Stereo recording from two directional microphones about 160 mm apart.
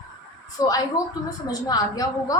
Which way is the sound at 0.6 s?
20° left (ahead or behind).